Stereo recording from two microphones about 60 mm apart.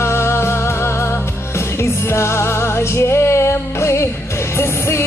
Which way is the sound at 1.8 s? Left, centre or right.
Left.